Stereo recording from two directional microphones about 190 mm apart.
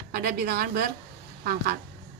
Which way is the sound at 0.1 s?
55° right (ahead or behind).